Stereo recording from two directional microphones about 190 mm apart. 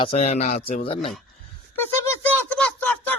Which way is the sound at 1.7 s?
10° left (ahead or behind).